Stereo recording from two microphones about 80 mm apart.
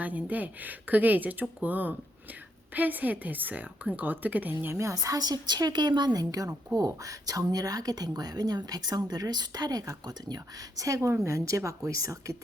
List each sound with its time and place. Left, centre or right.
0.0 s speech: right
4.6 s a woman's voice: right
6.7 s speech: right
10.8 s a woman's voice: right